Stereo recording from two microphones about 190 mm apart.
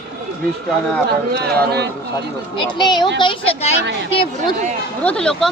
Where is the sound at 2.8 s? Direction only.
25° left (ahead or behind).